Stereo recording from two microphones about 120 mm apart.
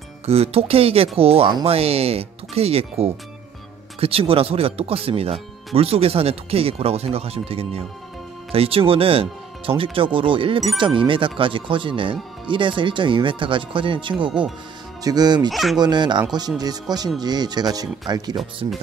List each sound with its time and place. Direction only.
0.3 s speech: 55° right (ahead or behind); by 15.5 s 35° right (ahead or behind)
15.5 s speech: centre (ahead or behind)
15.8 s speech: 35° right (ahead or behind)